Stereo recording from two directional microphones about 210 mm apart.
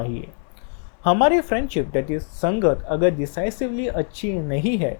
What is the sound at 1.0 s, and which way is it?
Speech, 15° left (ahead or behind).